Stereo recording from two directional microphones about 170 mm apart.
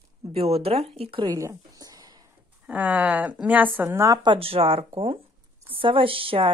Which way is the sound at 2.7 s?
10° right (ahead or behind).